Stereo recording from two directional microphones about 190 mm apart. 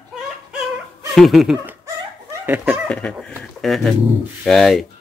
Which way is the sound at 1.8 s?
15° right (ahead or behind).